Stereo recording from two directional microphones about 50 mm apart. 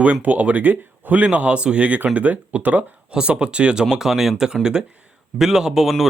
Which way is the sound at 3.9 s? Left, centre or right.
Centre.